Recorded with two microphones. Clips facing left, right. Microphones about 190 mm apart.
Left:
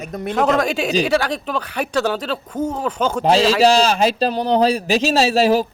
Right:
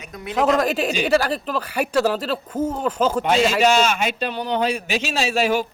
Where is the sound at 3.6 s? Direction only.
35° left (ahead or behind).